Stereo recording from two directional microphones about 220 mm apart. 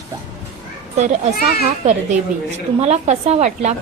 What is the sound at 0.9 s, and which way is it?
Speech, 30° right (ahead or behind).